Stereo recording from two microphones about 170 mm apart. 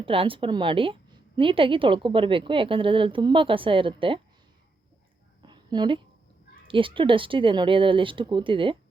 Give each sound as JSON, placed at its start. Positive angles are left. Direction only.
{"t": 0.0, "sound": "a woman's voice", "side_deg": -30}
{"t": 5.4, "sound": "a sound", "side_deg": -25}
{"t": 6.7, "sound": "speech", "side_deg": -30}